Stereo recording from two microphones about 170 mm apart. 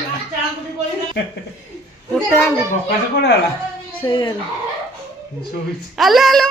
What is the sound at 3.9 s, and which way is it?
Speech, 30° left (ahead or behind).